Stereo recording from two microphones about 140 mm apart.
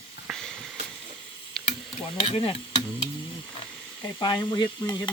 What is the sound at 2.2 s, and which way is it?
Stir, 40° left (ahead or behind).